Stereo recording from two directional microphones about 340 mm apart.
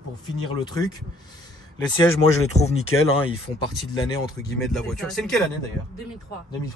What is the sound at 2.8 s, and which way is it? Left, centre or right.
Speech, left.